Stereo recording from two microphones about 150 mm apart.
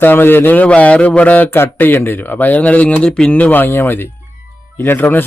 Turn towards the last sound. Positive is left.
turn(degrees=15)  # may be behind; listen again after turning